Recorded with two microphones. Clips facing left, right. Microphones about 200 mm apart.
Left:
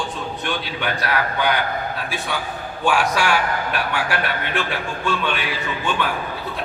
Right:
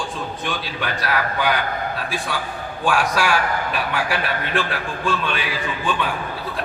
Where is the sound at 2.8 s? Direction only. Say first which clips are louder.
Left 1 dB; centre (ahead or behind).